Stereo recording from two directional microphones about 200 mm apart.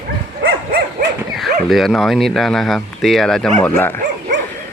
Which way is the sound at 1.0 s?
45° right (ahead or behind).